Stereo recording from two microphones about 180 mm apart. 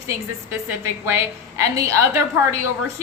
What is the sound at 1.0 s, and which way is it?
A woman's voice, 15° right (ahead or behind).